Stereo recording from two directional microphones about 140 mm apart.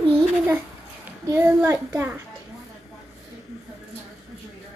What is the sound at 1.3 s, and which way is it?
Speech, 20° right (ahead or behind).